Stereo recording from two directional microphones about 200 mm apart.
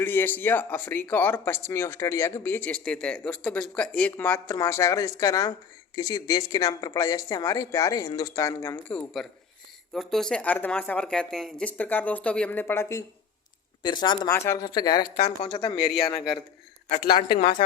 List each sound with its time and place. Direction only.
0.0 s speech: 10° left (ahead or behind)